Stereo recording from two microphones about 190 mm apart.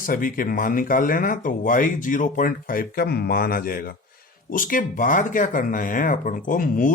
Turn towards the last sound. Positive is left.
turn(degrees=45)  # may be behind; listen again after turning